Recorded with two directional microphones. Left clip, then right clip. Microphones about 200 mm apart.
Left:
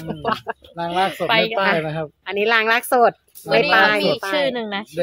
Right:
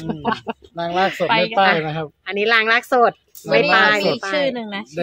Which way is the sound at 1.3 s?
55° left (ahead or behind).